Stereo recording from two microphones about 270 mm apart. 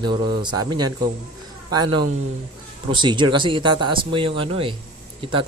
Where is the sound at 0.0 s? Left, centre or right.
Centre.